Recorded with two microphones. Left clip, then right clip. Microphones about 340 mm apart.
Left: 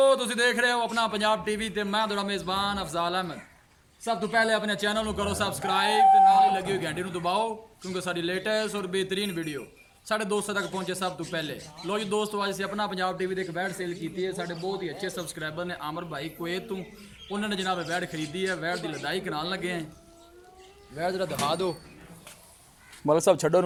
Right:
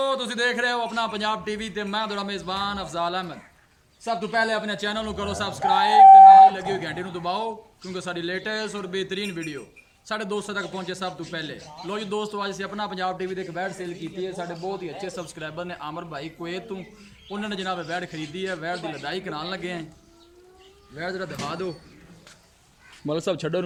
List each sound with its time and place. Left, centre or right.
0.0 s a man's voice: centre
20.9 s speech: centre
23.1 s speech: centre